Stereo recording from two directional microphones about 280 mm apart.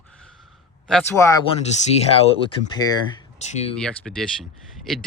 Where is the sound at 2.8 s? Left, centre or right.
Centre.